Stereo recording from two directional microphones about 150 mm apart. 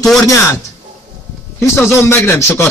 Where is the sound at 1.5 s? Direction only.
15° left (ahead or behind).